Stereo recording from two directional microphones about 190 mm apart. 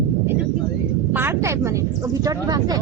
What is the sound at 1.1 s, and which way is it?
Speech, 10° right (ahead or behind).